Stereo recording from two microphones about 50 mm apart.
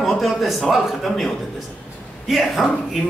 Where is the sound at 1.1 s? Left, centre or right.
Centre.